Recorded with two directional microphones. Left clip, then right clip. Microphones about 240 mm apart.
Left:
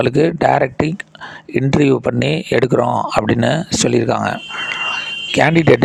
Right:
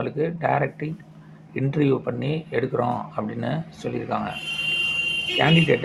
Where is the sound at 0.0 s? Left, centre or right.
Left.